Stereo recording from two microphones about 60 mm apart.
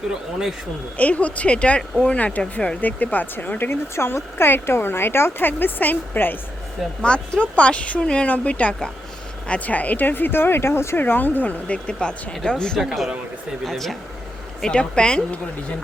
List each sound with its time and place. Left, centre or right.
0.1 s speech: centre
0.9 s speech: left
2.8 s speech: left
3.7 s speech: left
7.0 s speech: centre; by 11.0 s left
11.0 s speech: left; by 12.8 s centre
12.8 s speech: centre
14.6 s speech: centre